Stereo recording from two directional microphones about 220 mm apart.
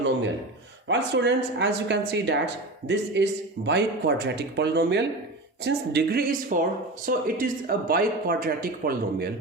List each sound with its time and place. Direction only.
0.9 s speech: 50° right (ahead or behind)